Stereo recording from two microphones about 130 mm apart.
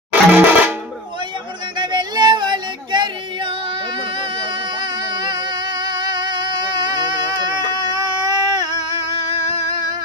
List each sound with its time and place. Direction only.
0.1 s music: 15° right (ahead or behind)
1.8 s a sound: 35° right (ahead or behind)
4.2 s music: 35° right (ahead or behind)